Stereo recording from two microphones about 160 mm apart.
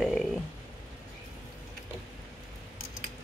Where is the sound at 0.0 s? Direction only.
Centre (ahead or behind).